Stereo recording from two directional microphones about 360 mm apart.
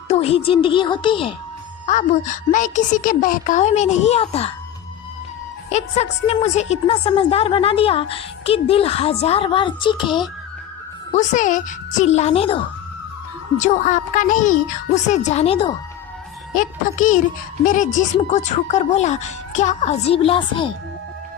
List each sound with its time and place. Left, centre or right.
0.1 s a woman's voice: centre
5.7 s a woman's voice: centre